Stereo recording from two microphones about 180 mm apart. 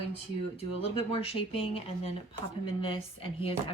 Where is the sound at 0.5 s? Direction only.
30° left (ahead or behind).